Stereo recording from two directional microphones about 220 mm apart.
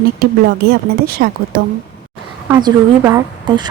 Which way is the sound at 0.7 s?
45° right (ahead or behind).